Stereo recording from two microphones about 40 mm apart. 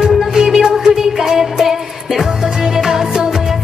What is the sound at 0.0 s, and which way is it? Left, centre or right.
Music, centre.